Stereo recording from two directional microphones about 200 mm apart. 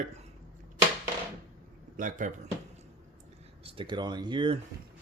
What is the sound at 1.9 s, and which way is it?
Speech, 40° right (ahead or behind).